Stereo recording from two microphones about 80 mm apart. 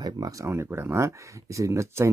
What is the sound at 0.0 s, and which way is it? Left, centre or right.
Speech, right.